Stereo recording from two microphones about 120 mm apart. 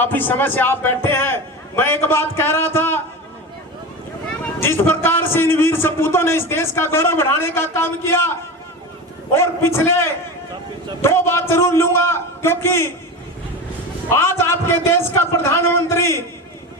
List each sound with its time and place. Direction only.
0.0 s a man's voice: 15° left (ahead or behind)
4.6 s a man's voice: 20° left (ahead or behind)
9.3 s a man's voice: 20° left (ahead or behind)
14.1 s a man's voice: 20° left (ahead or behind)